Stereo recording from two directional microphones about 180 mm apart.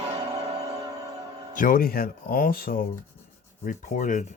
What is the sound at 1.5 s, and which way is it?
Speech, 50° left (ahead or behind).